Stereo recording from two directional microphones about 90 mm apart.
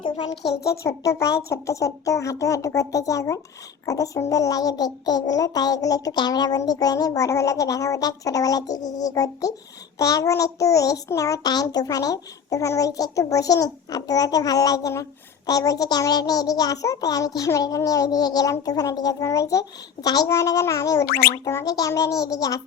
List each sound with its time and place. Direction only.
0.8 s child singing: 40° left (ahead or behind)
4.3 s a child's voice: 40° left (ahead or behind)
6.7 s child singing: 45° left (ahead or behind)
15.4 s a child's voice: 40° left (ahead or behind)
18.6 s child singing: 45° left (ahead or behind)